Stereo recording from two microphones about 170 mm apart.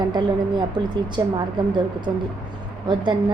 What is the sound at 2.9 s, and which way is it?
Speech, 25° right (ahead or behind).